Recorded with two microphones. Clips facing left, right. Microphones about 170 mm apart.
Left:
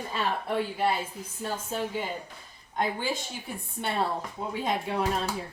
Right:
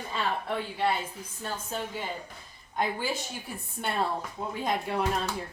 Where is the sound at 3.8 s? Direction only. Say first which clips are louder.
Left 1 dB; centre (ahead or behind).